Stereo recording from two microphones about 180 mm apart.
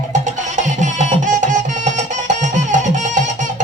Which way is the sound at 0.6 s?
45° right (ahead or behind).